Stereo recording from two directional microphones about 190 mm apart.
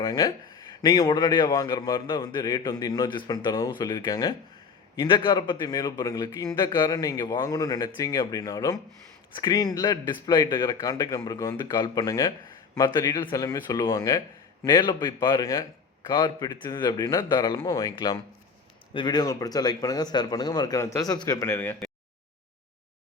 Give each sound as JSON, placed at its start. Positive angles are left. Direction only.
{"t": 0.0, "sound": "a man's voice", "side_deg": 20}